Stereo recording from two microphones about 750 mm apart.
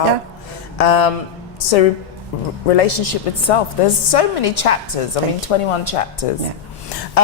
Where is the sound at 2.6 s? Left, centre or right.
Left.